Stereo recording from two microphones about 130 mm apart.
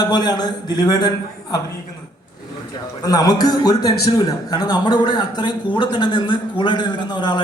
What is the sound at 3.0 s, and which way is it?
A man's voice, 30° left (ahead or behind).